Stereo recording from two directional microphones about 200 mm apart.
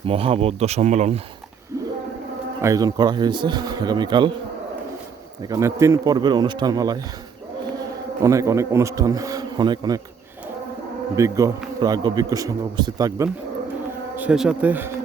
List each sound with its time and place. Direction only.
0.0 s speech: 30° right (ahead or behind)
2.6 s speech: 15° right (ahead or behind)
5.4 s speech: 15° right (ahead or behind)
8.2 s speech: 15° right (ahead or behind)
11.2 s speech: 15° right (ahead or behind)
14.2 s speech: 5° right (ahead or behind)